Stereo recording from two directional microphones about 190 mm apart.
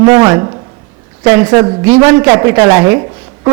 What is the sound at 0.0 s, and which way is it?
A man's voice, 20° right (ahead or behind).